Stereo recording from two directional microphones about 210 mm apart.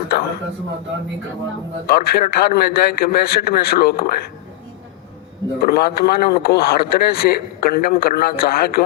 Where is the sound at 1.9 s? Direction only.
45° left (ahead or behind).